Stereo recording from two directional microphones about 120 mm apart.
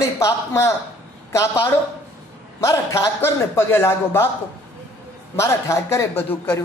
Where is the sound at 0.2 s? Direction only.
20° left (ahead or behind).